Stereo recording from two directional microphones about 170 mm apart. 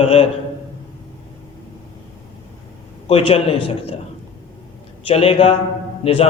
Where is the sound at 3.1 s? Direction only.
35° left (ahead or behind).